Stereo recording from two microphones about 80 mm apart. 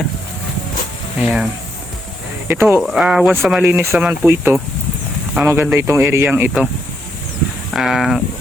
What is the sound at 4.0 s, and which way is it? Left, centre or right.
Speech, centre.